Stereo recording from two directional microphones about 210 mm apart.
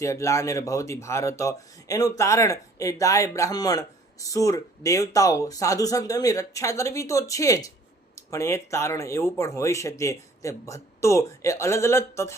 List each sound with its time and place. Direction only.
0.0 s speech: 15° left (ahead or behind)